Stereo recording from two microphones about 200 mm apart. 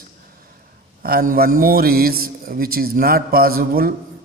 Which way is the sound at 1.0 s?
45° right (ahead or behind).